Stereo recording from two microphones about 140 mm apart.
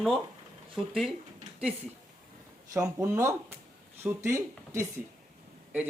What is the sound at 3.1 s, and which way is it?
A man's voice, 20° right (ahead or behind).